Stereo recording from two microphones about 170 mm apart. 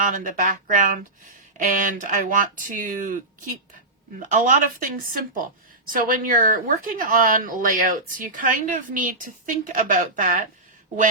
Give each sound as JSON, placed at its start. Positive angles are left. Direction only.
{"t": 0.0, "sound": "speech", "side_deg": -55}